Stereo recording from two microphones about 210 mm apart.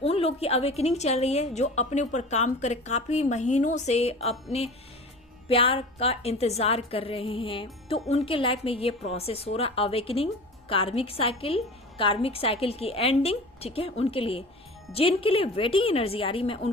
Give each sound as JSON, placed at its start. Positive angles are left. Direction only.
{"t": 0.0, "sound": "a woman's voice", "side_deg": 30}
{"t": 5.5, "sound": "a woman's voice", "side_deg": 25}